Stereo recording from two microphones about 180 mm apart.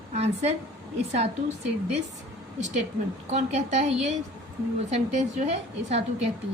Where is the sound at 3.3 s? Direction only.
40° right (ahead or behind).